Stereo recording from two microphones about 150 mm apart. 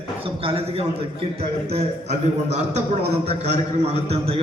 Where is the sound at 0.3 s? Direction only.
40° right (ahead or behind).